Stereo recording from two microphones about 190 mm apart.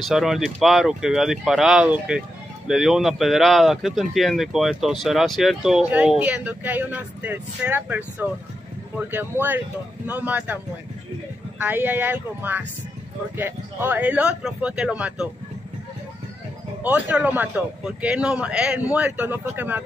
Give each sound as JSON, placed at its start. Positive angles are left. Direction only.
{"t": 0.0, "sound": "a man's voice", "side_deg": 0}
{"t": 16.8, "sound": "a man's voice", "side_deg": -10}